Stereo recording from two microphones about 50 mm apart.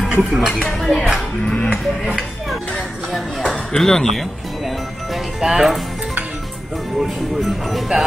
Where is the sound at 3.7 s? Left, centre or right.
Centre.